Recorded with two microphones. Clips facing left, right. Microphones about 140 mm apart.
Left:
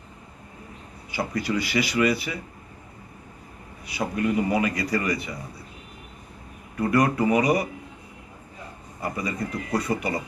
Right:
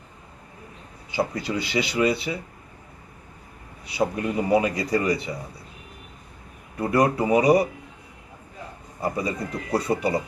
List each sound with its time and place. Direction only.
1.5 s a man's voice: 25° right (ahead or behind)
3.8 s a man's voice: 30° right (ahead or behind)
6.7 s a man's voice: 30° right (ahead or behind)
9.0 s a man's voice: 25° right (ahead or behind)